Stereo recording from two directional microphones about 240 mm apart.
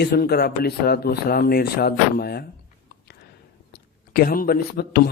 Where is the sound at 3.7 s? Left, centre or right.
Left.